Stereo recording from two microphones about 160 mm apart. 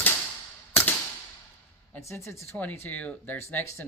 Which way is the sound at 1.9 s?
15° left (ahead or behind).